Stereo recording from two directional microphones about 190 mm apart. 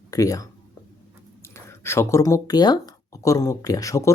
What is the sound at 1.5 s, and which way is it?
Speech, 15° left (ahead or behind).